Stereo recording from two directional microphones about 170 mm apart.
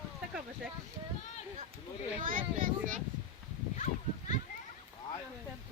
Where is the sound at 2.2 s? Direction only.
50° right (ahead or behind).